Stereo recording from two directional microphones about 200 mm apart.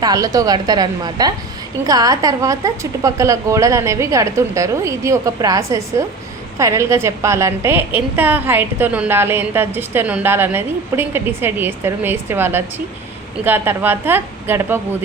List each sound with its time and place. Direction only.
0.0 s a woman's voice: 20° right (ahead or behind)